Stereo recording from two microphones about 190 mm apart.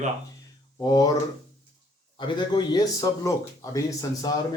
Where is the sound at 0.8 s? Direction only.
20° left (ahead or behind).